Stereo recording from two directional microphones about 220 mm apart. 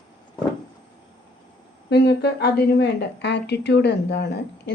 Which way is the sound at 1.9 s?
50° left (ahead or behind).